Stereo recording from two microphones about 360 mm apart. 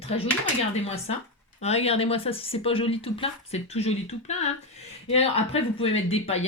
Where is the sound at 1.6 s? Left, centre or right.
Centre.